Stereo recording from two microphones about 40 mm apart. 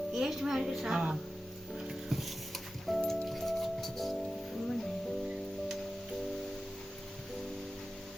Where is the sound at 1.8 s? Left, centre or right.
Centre.